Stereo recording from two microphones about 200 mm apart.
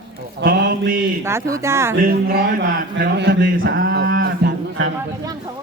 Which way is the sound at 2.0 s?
45° right (ahead or behind).